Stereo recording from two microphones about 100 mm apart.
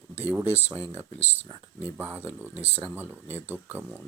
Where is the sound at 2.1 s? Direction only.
20° right (ahead or behind).